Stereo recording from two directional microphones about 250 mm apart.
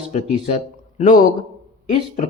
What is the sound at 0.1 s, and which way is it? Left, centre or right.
A man's voice, left.